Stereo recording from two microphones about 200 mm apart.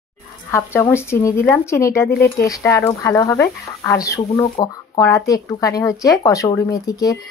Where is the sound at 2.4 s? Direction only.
15° left (ahead or behind).